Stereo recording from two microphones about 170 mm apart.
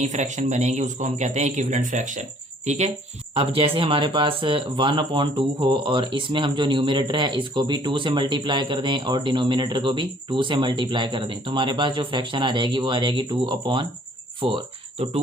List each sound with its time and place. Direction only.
0.0 s a man's voice: 45° right (ahead or behind)